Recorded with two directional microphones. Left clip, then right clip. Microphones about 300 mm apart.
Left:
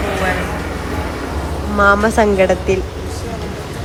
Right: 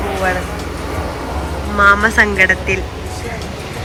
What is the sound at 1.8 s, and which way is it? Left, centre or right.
Speech, centre.